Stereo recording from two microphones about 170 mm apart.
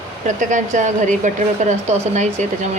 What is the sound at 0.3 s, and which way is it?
Speech, 45° right (ahead or behind).